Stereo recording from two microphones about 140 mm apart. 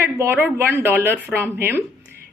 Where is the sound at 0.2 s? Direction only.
15° right (ahead or behind).